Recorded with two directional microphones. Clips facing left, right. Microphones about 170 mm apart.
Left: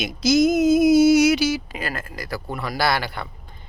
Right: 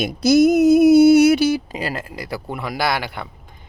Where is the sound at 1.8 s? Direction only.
25° right (ahead or behind).